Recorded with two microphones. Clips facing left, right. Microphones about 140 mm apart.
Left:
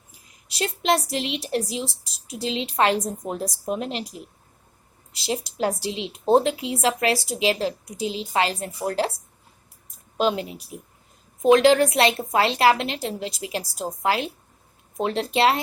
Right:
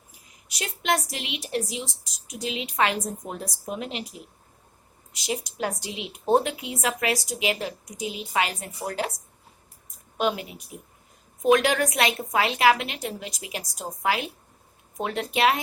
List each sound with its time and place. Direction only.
0.4 s a woman's voice: 30° left (ahead or behind)
5.1 s a woman's voice: 30° left (ahead or behind)